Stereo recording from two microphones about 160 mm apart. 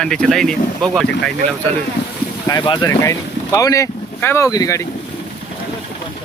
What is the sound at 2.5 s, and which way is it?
Speech, 25° left (ahead or behind).